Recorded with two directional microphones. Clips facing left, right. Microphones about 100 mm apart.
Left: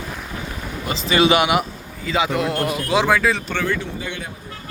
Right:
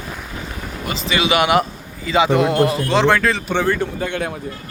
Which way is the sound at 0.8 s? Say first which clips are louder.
Left 3 dB; 35° left (ahead or behind).